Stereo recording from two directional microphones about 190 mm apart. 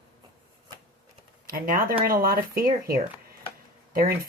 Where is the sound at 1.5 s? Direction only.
50° right (ahead or behind).